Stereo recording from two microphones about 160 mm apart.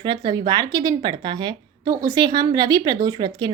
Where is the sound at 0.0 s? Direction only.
25° right (ahead or behind).